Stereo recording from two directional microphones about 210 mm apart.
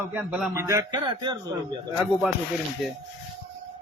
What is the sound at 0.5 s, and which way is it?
Speech, 15° right (ahead or behind).